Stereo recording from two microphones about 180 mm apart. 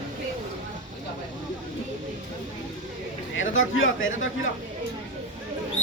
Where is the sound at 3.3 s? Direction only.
90° left.